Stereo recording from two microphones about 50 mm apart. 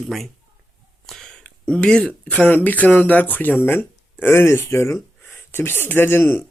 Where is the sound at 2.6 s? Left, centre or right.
Left.